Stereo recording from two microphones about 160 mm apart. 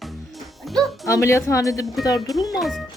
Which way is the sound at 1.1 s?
20° left (ahead or behind).